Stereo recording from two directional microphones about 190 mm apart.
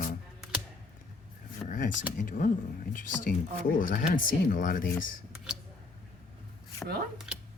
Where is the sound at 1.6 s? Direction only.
45° left (ahead or behind).